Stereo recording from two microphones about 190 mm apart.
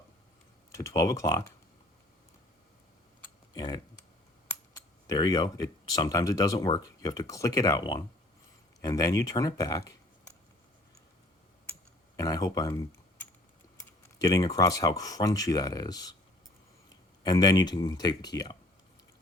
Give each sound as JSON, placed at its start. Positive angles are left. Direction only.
{"t": 0.7, "sound": "speech", "side_deg": 15}
{"t": 3.5, "sound": "speech", "side_deg": 20}
{"t": 5.0, "sound": "speech", "side_deg": 20}
{"t": 12.1, "sound": "speech", "side_deg": 20}
{"t": 14.2, "sound": "speech", "side_deg": 20}
{"t": 17.2, "sound": "speech", "side_deg": 20}